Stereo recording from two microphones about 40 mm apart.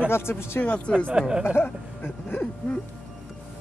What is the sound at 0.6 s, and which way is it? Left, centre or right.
Speech, left.